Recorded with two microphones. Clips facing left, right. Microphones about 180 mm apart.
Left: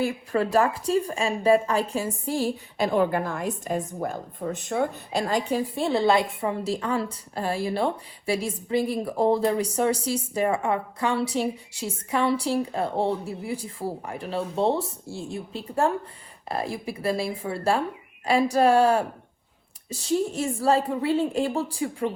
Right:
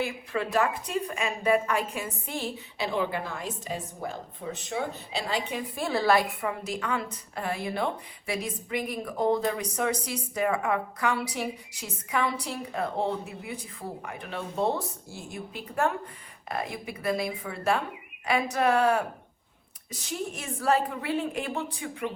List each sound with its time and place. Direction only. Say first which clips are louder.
0.0 s a woman's voice: left 5 dB; 35° left (ahead or behind)
2.7 s a woman's voice: left 6 dB; 50° left (ahead or behind)
5.4 s a woman's voice: left 7 dB; 35° left (ahead or behind)
5.9 s a woman's voice: left 2 dB; 20° left (ahead or behind)
6.4 s a woman's voice: left 5 dB; 30° left (ahead or behind)